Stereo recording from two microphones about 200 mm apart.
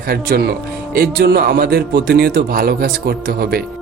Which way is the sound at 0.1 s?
50° right (ahead or behind).